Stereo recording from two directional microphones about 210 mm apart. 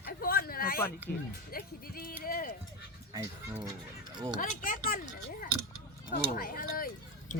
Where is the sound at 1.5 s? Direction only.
45° left (ahead or behind).